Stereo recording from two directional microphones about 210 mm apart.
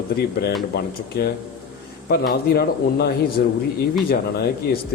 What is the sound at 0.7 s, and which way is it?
A man's voice, 50° left (ahead or behind).